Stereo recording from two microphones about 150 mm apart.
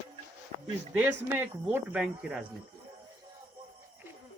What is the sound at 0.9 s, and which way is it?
Speech, 15° right (ahead or behind).